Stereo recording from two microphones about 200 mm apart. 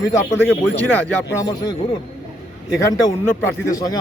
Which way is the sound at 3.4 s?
15° left (ahead or behind).